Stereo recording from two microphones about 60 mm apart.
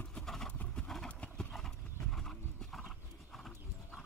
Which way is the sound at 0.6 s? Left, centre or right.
Centre.